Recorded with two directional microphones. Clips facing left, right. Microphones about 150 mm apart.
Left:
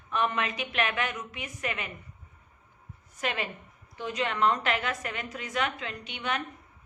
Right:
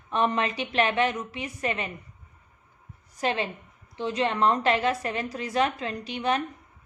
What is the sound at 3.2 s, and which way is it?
A woman's voice, 30° right (ahead or behind).